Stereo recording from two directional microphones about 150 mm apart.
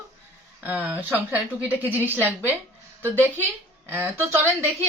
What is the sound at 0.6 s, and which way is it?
A woman's voice, 10° right (ahead or behind).